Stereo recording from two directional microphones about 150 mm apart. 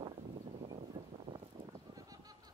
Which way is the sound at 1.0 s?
25° right (ahead or behind).